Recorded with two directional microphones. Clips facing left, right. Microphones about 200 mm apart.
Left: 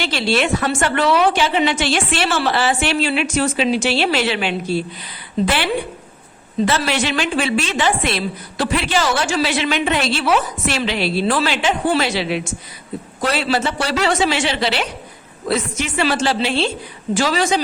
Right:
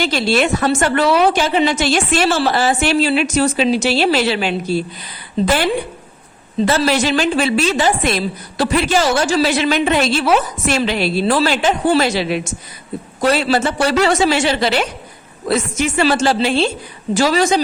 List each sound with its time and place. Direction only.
0.0 s a woman's voice: 45° right (ahead or behind)
6.7 s a woman's voice: 40° right (ahead or behind)